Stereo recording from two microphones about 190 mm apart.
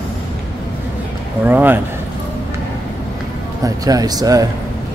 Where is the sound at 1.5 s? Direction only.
10° right (ahead or behind).